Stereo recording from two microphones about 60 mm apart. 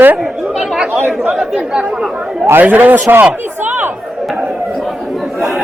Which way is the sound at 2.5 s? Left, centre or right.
Right.